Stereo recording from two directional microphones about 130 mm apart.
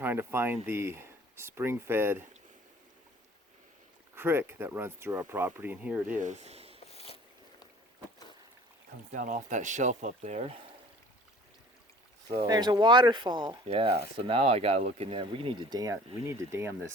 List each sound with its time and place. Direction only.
0.0 s speech: 15° right (ahead or behind)
4.1 s speech: 20° right (ahead or behind)
6.1 s speech: 65° right (ahead or behind)
6.7 s a sound: 50° left (ahead or behind)
9.1 s speech: 90° right; by 10.5 s 65° right (ahead or behind)
12.3 s speech: 35° right (ahead or behind)